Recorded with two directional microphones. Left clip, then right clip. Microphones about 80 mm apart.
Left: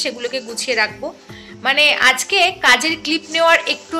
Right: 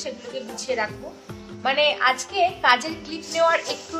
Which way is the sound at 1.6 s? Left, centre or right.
Left.